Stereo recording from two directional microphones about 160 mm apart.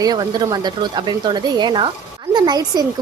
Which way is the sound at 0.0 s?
25° right (ahead or behind).